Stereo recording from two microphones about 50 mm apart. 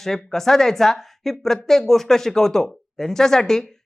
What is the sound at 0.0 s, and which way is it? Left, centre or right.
A woman's voice, centre.